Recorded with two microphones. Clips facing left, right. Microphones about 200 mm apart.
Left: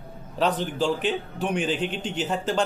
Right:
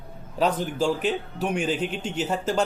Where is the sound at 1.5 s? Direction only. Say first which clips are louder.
Even; 40° right (ahead or behind).